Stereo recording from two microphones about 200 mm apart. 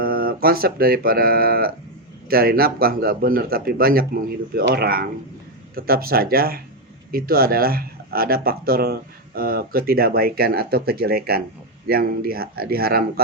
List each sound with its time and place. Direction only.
0.0 s speech: 45° right (ahead or behind)